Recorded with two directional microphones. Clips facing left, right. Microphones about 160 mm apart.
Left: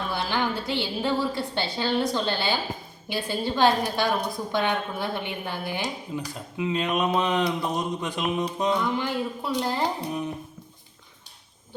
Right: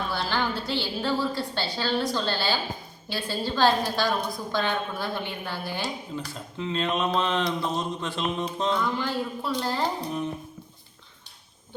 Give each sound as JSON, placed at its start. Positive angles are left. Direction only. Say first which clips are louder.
{"t": 0.1, "sound": "a woman's voice", "louder": "left 3 dB", "side_deg": 15}